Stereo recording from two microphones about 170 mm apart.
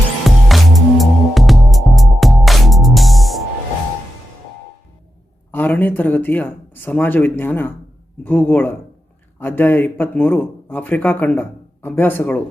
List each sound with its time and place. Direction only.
0.3 s music: centre (ahead or behind)
5.5 s speech: 10° left (ahead or behind)